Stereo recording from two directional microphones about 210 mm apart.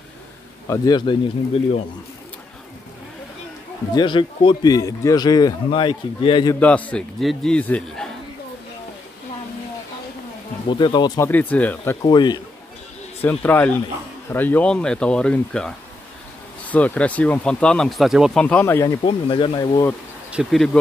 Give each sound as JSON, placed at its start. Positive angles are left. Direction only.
{"t": 0.7, "sound": "speech", "side_deg": 20}
{"t": 3.9, "sound": "speech", "side_deg": 20}
{"t": 6.6, "sound": "a man's voice", "side_deg": 5}
{"t": 10.7, "sound": "speech", "side_deg": 20}
{"t": 12.0, "sound": "speech", "side_deg": 20}
{"t": 13.2, "sound": "a man's voice", "side_deg": 10}
{"t": 19.0, "sound": "speech", "side_deg": 25}
{"t": 20.2, "sound": "a man's voice", "side_deg": 0}